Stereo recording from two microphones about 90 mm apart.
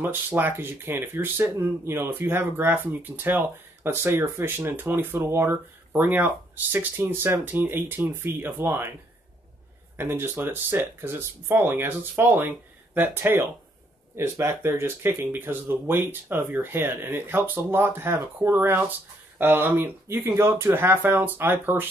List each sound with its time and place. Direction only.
0.0 s speech: 25° right (ahead or behind)
9.9 s speech: 25° right (ahead or behind)